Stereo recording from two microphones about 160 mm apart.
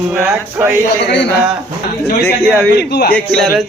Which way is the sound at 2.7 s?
85° left.